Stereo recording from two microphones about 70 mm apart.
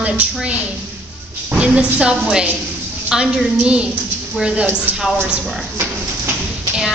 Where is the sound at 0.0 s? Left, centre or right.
Centre.